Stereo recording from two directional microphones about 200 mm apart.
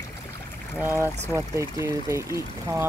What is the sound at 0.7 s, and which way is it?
Speech, 10° right (ahead or behind).